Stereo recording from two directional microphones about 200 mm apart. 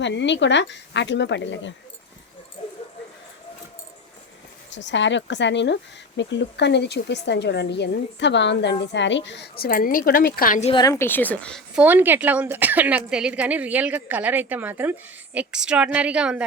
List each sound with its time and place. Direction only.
0.0 s speech: 60° left (ahead or behind)
4.7 s a woman's voice: 65° left (ahead or behind); by 10.7 s 45° left (ahead or behind)
10.7 s a woman's voice: 20° left (ahead or behind); by 16.5 s 5° right (ahead or behind)